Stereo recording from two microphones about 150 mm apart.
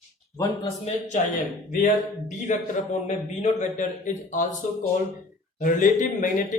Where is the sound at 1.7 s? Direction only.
55° left (ahead or behind).